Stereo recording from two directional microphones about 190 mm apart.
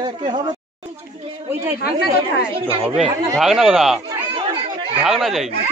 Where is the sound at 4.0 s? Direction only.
25° right (ahead or behind).